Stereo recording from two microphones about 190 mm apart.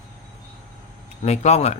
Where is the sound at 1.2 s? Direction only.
35° left (ahead or behind).